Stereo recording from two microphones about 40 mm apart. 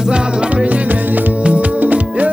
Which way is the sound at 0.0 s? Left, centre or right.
Right.